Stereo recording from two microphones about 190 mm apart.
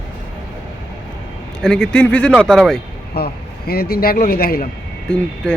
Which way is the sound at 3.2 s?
55° left (ahead or behind).